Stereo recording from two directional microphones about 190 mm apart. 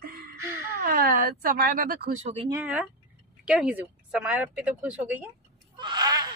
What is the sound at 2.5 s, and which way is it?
Speech, 10° right (ahead or behind).